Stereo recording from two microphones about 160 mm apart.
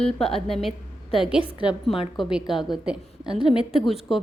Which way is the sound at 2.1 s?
Centre (ahead or behind).